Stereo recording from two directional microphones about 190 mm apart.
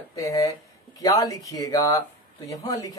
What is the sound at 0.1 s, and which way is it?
Speech, 20° left (ahead or behind).